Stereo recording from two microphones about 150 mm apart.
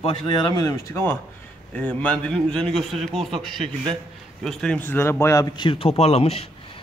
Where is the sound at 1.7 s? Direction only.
10° left (ahead or behind).